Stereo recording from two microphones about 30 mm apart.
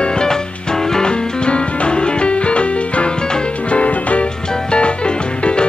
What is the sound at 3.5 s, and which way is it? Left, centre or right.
Music, left.